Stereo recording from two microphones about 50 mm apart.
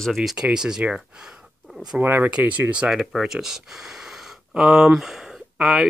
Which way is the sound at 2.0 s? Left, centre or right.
Right.